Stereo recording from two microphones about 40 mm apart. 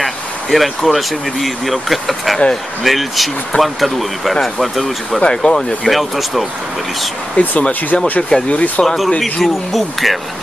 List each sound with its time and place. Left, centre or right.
0.0 s speech: centre
5.3 s speech: centre
5.9 s speech: centre
7.3 s speech: left
8.2 s speech: centre
8.5 s speech: left
8.8 s speech: centre